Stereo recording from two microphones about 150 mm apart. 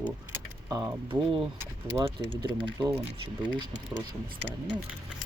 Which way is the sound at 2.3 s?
35° right (ahead or behind).